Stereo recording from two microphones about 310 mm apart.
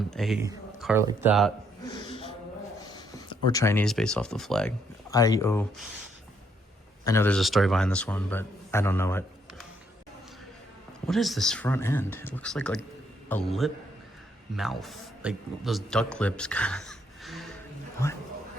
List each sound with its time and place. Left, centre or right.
0.1 s speech: centre
1.9 s snort: centre
2.8 s speech: centre
7.0 s a man's voice: centre
11.0 s a man's voice: centre